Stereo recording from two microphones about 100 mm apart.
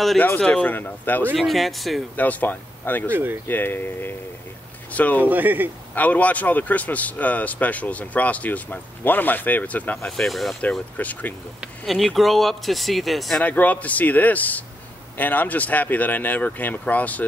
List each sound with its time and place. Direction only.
0.4 s speech: 10° left (ahead or behind)
1.3 s speech: centre (ahead or behind)
2.1 s speech: 20° left (ahead or behind)
3.1 s speech: 20° right (ahead or behind)
3.4 s speech: 20° left (ahead or behind)
5.2 s speech: 20° right (ahead or behind)
5.9 s speech: 15° left (ahead or behind)
10.6 s speech: 15° left (ahead or behind)
11.8 s speech: centre (ahead or behind)
13.4 s speech: 15° left (ahead or behind)